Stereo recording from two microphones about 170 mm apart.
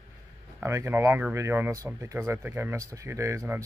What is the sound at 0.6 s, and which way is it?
Speech, 15° right (ahead or behind).